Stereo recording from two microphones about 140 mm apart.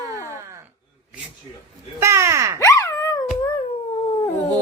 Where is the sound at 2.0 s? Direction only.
20° right (ahead or behind).